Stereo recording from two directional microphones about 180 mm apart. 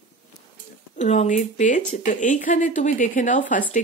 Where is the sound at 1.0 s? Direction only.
40° left (ahead or behind).